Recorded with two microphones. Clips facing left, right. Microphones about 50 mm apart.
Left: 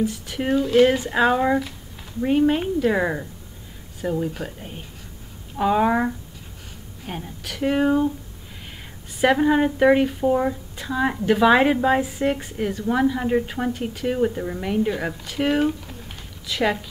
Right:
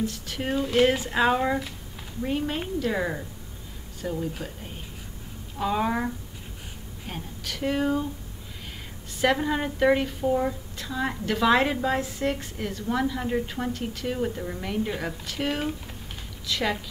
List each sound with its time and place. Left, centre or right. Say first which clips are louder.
0.0 s a woman's voice: left 5 dB; centre
2.2 s a woman's voice: left 9 dB; left
9.2 s a woman's voice: left 6 dB; centre
12.0 s a woman's voice: left 5 dB; centre